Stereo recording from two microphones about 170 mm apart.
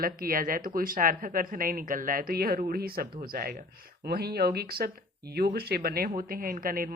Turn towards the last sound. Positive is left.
turn(degrees=-55)  # may be behind; listen again after turning